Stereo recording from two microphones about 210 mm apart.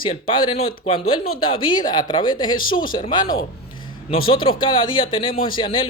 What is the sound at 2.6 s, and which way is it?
Speech, 75° left (ahead or behind).